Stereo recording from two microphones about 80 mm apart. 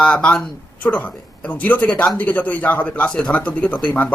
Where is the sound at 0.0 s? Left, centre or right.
Centre.